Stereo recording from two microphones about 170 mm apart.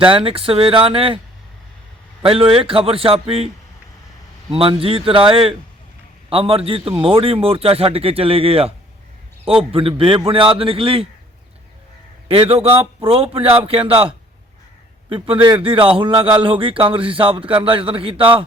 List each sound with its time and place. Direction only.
0.1 s a man's voice: 30° right (ahead or behind)
2.2 s a man's voice: 35° right (ahead or behind)
4.5 s a man's voice: 35° right (ahead or behind)
12.3 s a man's voice: 35° right (ahead or behind)
15.1 s a man's voice: 30° right (ahead or behind)